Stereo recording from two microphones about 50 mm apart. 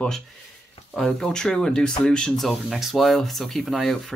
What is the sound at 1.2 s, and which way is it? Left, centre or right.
Speech, centre.